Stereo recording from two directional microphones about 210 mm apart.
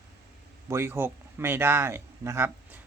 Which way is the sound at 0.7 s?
10° right (ahead or behind).